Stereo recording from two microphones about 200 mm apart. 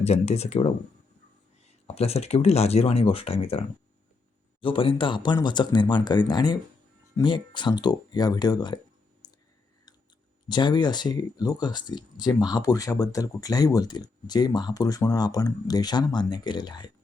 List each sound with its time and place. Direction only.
0.0 s speech: 30° left (ahead or behind)
4.6 s speech: 25° left (ahead or behind)
9.2 s clicking: 20° left (ahead or behind)
10.5 s speech: 20° left (ahead or behind)